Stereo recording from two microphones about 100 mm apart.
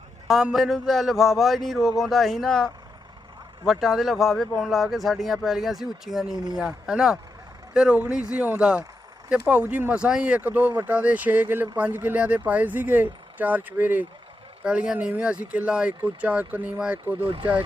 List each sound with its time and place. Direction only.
0.3 s speech: 5° right (ahead or behind)
17.2 s speech: 55° right (ahead or behind)